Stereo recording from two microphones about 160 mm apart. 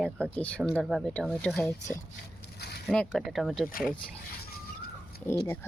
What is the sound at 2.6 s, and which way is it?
Zipper, 90° left.